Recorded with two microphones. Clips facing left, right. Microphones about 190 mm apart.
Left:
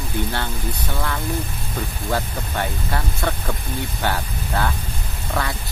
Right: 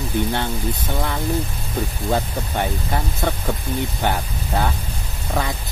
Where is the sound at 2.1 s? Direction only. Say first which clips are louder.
Right 2 dB; 15° right (ahead or behind).